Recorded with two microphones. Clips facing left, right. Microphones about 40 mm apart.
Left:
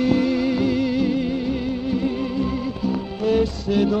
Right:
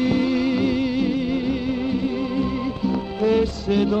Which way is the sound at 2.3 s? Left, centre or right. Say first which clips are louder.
Right 1 dB; centre.